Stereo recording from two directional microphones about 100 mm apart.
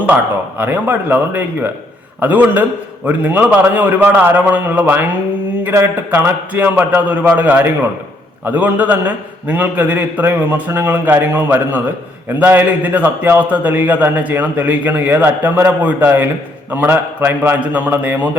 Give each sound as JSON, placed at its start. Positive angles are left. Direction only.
{"t": 0.6, "sound": "a man's voice", "side_deg": -20}